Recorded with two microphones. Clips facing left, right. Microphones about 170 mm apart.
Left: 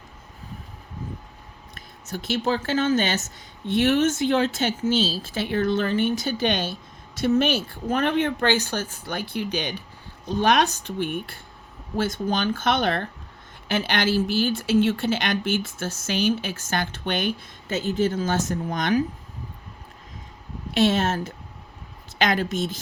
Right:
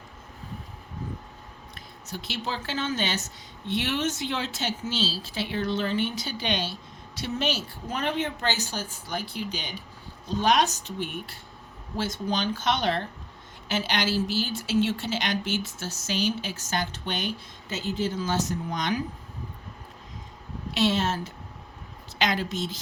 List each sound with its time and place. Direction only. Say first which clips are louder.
1.7 s a woman's voice: left 5 dB; 50° left (ahead or behind)
20.7 s speech: left 4 dB; 50° left (ahead or behind)